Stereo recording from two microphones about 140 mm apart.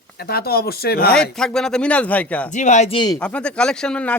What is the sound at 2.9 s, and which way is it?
Speech, 35° left (ahead or behind).